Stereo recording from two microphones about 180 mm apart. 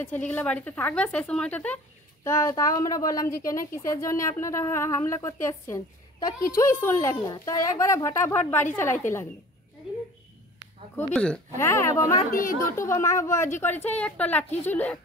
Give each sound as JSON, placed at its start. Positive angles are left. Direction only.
{"t": 0.0, "sound": "a woman's voice", "side_deg": 10}
{"t": 2.2, "sound": "a woman's voice", "side_deg": 20}
{"t": 11.1, "sound": "speech", "side_deg": 5}
{"t": 11.5, "sound": "a woman's voice", "side_deg": 15}
{"t": 12.3, "sound": "a woman's voice", "side_deg": 50}
{"t": 12.5, "sound": "a woman's voice", "side_deg": 15}